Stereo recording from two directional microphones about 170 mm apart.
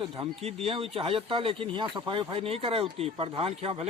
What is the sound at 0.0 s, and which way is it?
Speech, 35° right (ahead or behind).